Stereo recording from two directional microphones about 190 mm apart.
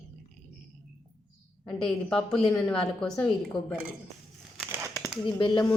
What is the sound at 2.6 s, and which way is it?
Speech, 5° left (ahead or behind).